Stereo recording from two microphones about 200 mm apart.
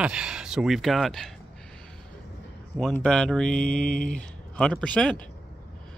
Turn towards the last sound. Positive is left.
turn(degrees=5)  # may be behind; listen again after turning